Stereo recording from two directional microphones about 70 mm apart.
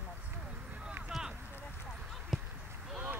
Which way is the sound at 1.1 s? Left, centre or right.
Centre.